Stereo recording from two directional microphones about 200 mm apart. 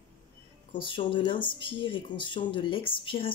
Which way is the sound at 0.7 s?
25° left (ahead or behind).